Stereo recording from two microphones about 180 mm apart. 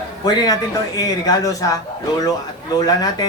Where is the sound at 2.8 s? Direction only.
20° left (ahead or behind).